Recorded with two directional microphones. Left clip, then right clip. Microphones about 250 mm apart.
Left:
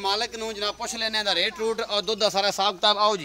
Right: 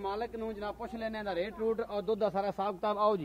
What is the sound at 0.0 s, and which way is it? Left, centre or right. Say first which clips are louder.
Speech: left 9 dB; left.